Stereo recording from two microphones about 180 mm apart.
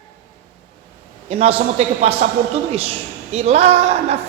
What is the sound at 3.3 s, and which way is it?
Speech, 35° right (ahead or behind).